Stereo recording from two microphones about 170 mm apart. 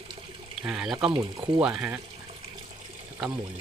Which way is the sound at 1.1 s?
15° right (ahead or behind).